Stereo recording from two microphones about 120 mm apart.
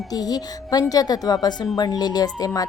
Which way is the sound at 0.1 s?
35° left (ahead or behind).